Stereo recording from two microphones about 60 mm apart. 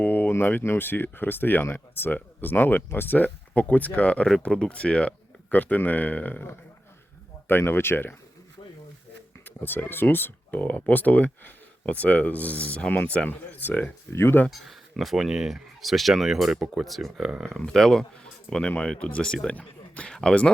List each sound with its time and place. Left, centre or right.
0.0 s a sound: left
0.3 s a sound: left
0.6 s speech: left
9.4 s speech: left
14.1 s speech: left
14.5 s speech: centre
17.7 s speech: centre